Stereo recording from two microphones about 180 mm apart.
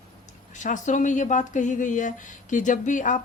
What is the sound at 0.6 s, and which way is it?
Speech, 45° left (ahead or behind).